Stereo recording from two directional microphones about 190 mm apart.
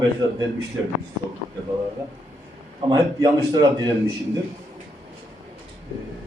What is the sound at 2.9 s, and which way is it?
A man's voice, 20° right (ahead or behind).